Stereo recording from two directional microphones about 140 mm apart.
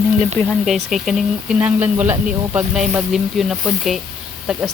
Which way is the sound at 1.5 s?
10° right (ahead or behind).